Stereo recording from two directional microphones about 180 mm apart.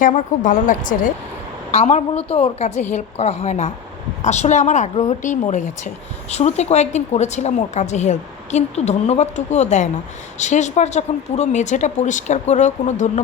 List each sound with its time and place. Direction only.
0.0 s a woman's voice: 45° left (ahead or behind)
1.7 s a woman's voice: 35° left (ahead or behind)